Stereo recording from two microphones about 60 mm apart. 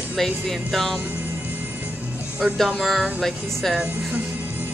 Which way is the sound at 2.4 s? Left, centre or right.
Centre.